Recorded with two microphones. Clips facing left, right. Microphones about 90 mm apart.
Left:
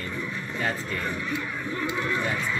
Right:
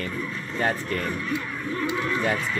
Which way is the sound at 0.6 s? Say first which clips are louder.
Right 5 dB; 55° right (ahead or behind).